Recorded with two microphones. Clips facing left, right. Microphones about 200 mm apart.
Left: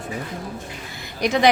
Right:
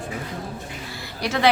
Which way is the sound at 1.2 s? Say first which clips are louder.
Left 5 dB; 15° left (ahead or behind).